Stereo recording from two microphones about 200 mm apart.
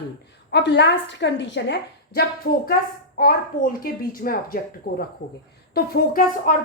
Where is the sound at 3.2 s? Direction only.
45° left (ahead or behind).